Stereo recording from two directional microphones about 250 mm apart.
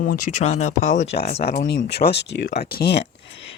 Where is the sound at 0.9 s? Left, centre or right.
Left.